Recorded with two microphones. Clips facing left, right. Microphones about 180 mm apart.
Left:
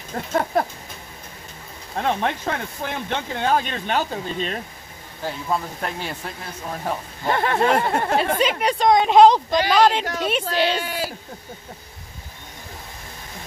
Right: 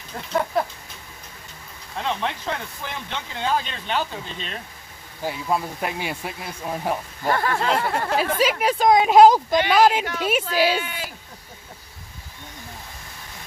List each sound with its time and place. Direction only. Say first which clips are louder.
0.1 s speech: left 2 dB; 50° left (ahead or behind)
2.0 s speech: left 4 dB; 50° left (ahead or behind)
5.2 s speech: right 1 dB; 10° right (ahead or behind)
7.2 s speech: left 3 dB; 20° left (ahead or behind)
8.2 s speech: even; 5° right (ahead or behind)
10.8 s speech: left 4 dB; 35° left (ahead or behind)